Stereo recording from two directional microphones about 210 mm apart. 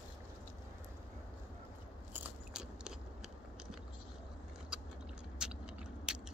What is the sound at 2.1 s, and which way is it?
Biting, 5° right (ahead or behind).